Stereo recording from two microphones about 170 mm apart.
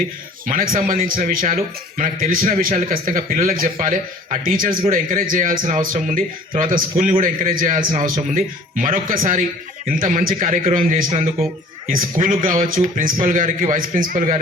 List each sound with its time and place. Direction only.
0.4 s a man's voice: 55° right (ahead or behind)